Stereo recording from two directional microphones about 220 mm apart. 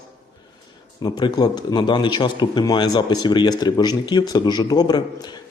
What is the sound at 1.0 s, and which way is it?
Speech, 20° left (ahead or behind).